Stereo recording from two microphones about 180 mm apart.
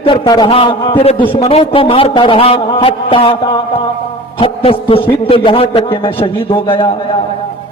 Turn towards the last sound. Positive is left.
turn(degrees=30)  # may be behind; listen again after turning